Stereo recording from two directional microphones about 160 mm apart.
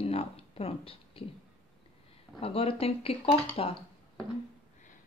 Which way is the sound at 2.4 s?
35° left (ahead or behind).